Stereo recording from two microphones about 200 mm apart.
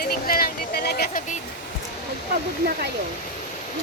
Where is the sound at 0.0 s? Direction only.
50° left (ahead or behind).